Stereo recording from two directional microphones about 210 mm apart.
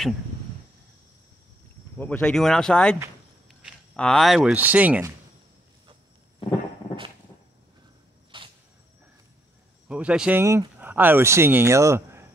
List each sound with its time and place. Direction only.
2.0 s speech: 5° left (ahead or behind)
8.3 s a sound: 25° right (ahead or behind)
9.8 s speech: 5° right (ahead or behind)